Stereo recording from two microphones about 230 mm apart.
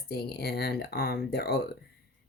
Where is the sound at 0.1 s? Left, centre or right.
Left.